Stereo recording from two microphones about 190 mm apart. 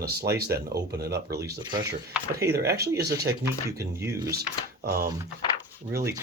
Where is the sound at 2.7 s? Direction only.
55° right (ahead or behind).